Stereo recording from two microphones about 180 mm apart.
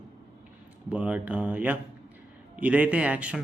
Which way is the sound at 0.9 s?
10° right (ahead or behind).